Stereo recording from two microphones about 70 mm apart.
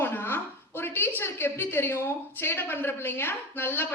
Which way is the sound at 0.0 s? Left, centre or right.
Left.